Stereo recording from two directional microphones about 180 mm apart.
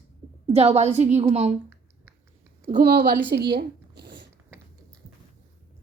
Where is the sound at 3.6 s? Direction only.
65° right (ahead or behind).